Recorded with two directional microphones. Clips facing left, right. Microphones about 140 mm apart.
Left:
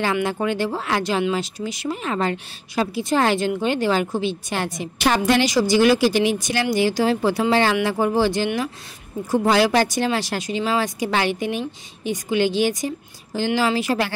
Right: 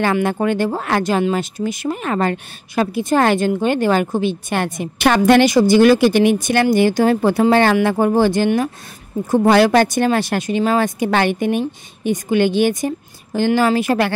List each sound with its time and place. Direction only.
0.0 s speech: 55° right (ahead or behind)